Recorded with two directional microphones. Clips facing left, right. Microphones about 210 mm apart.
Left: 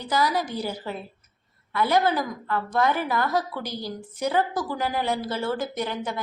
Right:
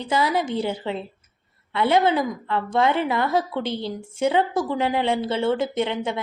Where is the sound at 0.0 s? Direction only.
25° right (ahead or behind).